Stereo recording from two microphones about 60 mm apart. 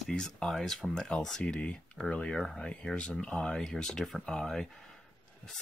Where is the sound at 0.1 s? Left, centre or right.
Centre.